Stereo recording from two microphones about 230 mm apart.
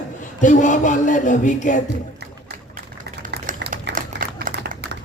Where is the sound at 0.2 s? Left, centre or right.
Left.